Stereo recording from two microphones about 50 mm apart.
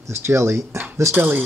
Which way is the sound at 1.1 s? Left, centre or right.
Right.